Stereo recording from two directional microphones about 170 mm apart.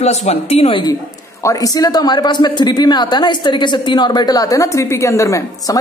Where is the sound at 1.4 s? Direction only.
20° left (ahead or behind).